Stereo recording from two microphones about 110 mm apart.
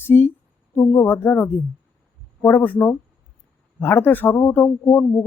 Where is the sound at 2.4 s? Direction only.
20° left (ahead or behind).